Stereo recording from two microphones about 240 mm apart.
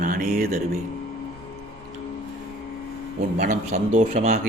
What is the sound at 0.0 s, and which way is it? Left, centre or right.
Speech, right.